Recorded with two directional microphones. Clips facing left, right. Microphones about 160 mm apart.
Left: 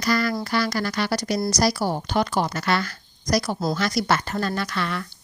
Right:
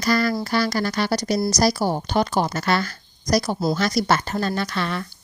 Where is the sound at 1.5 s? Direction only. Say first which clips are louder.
Right 1 dB; 25° right (ahead or behind).